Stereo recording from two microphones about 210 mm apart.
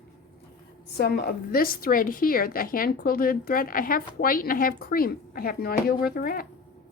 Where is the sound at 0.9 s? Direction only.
50° left (ahead or behind).